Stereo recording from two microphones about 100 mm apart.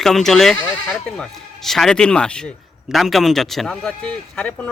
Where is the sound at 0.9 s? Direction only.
5° left (ahead or behind).